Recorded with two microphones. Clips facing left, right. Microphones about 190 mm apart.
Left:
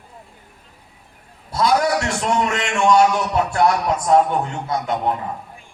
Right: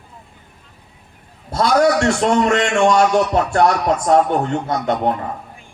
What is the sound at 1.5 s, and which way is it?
A man's voice, 45° right (ahead or behind).